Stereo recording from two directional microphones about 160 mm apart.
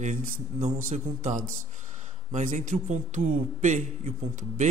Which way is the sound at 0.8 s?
50° right (ahead or behind).